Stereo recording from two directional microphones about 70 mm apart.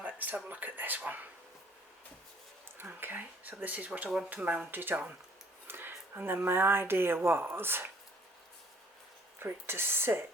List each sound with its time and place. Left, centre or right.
0.0 s speech: right
2.7 s speech: right
9.4 s speech: right